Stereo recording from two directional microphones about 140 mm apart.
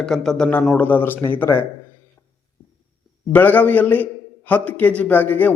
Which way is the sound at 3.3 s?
10° left (ahead or behind).